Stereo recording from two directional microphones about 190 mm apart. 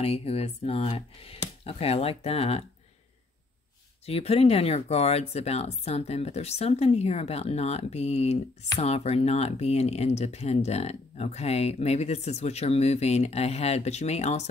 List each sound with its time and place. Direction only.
0.0 s speech: 30° left (ahead or behind)
4.0 s speech: 30° left (ahead or behind)